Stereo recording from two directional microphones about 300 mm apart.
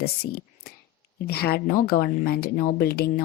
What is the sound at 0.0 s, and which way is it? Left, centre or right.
Speech, left.